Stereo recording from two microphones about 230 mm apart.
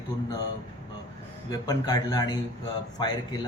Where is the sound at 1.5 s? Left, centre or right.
Centre.